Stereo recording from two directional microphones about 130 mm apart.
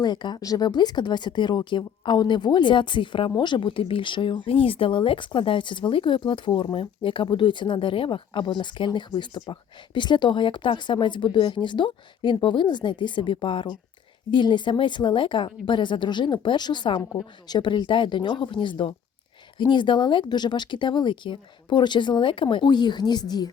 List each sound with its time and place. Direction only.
0.0 s speech: 35° left (ahead or behind)